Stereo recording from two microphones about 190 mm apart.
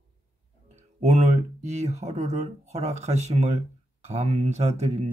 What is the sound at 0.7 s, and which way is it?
Speech, 40° right (ahead or behind).